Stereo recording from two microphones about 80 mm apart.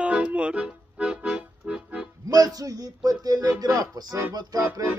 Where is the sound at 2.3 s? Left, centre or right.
Right.